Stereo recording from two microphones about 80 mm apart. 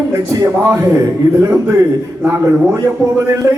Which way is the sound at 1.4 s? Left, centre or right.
Right.